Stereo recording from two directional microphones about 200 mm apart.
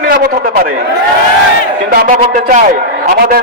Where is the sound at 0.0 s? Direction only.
50° right (ahead or behind).